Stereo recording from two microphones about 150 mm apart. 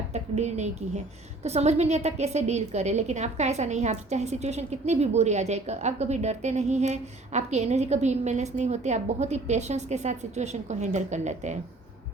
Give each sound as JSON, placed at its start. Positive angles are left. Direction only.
{"t": 0.1, "sound": "a woman's voice", "side_deg": -50}